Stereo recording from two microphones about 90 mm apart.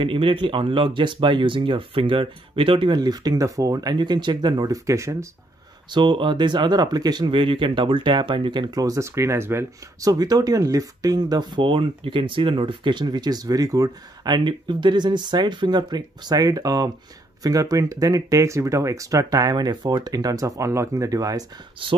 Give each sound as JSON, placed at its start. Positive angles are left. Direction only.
{"t": 0.0, "sound": "speech", "side_deg": -75}
{"t": 3.0, "sound": "speech", "side_deg": -45}
{"t": 5.9, "sound": "speech", "side_deg": -60}
{"t": 7.2, "sound": "speech", "side_deg": -70}
{"t": 10.0, "sound": "speech", "side_deg": -45}
{"t": 21.8, "sound": "speech", "side_deg": -70}